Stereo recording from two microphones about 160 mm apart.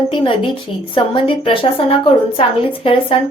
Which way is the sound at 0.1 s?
35° left (ahead or behind).